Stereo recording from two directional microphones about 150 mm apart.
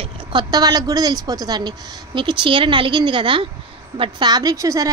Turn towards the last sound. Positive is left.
turn(degrees=-20)  # may be behind; listen again after turning